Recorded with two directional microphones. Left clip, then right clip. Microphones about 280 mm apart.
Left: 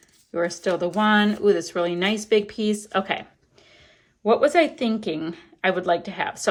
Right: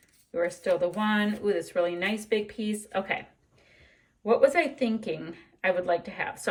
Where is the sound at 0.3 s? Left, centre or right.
Centre.